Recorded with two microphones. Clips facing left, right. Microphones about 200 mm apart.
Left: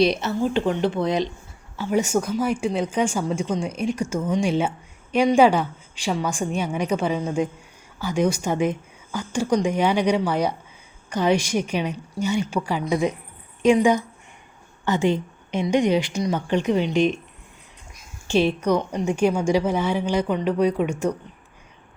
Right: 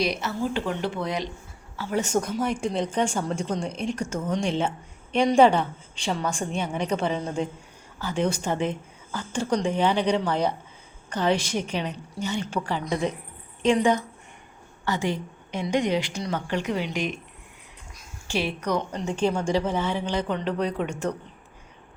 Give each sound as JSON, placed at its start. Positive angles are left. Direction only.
{"t": 0.0, "sound": "a woman's voice", "side_deg": 25}
{"t": 14.8, "sound": "a woman's voice", "side_deg": 20}
{"t": 18.3, "sound": "a woman's voice", "side_deg": 20}